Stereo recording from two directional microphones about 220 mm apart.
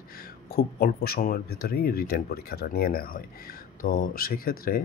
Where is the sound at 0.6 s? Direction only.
45° left (ahead or behind).